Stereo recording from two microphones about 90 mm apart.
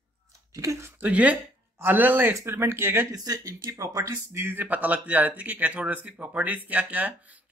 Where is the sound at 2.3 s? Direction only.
30° right (ahead or behind).